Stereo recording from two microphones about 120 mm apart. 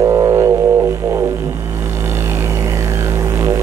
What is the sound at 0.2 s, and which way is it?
Music, 25° right (ahead or behind).